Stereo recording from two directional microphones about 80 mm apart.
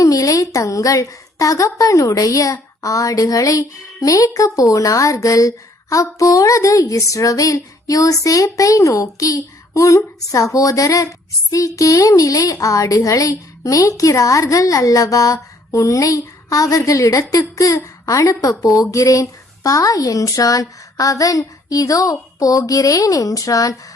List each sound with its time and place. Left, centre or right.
0.0 s a child's voice: left